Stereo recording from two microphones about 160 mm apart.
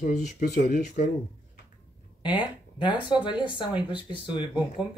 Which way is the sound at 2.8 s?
30° left (ahead or behind).